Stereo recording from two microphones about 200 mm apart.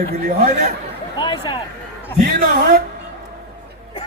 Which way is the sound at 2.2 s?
50° right (ahead or behind).